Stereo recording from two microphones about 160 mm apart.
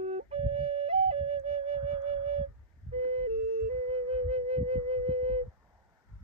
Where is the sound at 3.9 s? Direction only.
40° right (ahead or behind).